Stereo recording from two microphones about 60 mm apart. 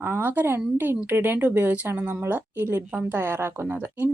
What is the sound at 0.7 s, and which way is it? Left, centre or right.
Speech, right.